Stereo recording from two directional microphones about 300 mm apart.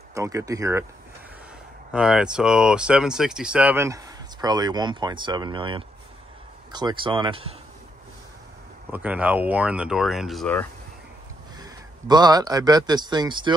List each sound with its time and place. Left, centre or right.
0.1 s speech: centre
1.9 s speech: centre
8.9 s speech: centre
11.5 s a man's voice: centre